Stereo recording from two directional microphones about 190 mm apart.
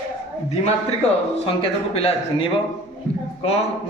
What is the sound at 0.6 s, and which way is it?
A man's voice, 30° left (ahead or behind).